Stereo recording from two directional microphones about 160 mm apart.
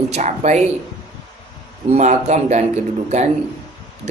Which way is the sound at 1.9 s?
45° right (ahead or behind).